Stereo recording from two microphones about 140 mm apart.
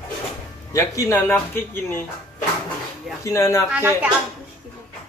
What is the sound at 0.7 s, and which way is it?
Speech, 20° left (ahead or behind).